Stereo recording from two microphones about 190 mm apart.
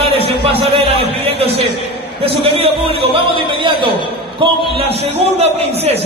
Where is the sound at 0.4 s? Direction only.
30° right (ahead or behind).